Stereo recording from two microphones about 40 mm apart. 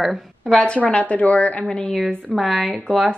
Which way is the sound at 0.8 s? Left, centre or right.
Left.